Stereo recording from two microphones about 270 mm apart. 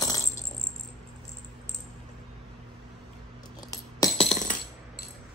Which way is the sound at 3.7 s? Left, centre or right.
Centre.